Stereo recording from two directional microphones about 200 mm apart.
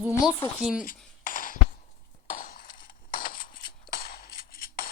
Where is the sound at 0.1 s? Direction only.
15° left (ahead or behind).